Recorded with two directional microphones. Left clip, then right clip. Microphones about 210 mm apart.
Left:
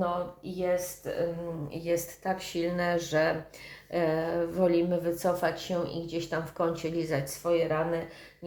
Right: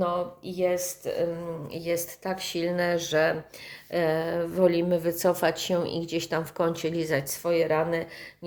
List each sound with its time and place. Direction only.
0.5 s a woman's voice: 40° right (ahead or behind)